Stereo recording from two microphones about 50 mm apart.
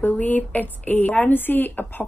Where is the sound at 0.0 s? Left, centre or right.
Left.